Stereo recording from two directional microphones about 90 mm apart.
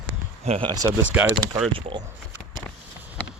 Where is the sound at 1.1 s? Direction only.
20° right (ahead or behind).